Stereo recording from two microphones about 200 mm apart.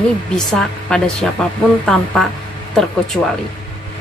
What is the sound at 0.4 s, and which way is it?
A woman's voice, centre (ahead or behind).